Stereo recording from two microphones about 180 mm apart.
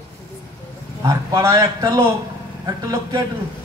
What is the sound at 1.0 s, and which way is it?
Speech, 15° right (ahead or behind).